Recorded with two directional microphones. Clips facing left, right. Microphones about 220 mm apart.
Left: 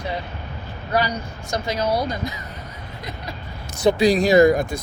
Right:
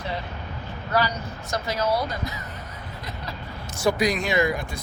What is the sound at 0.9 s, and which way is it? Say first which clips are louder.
Speech: left 2 dB; 15° left (ahead or behind).